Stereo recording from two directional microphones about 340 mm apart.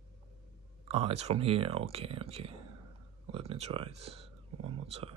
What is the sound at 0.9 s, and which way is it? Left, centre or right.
Speech, centre.